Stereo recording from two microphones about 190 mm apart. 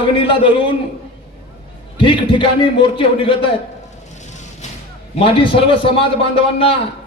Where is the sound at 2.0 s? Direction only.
25° left (ahead or behind).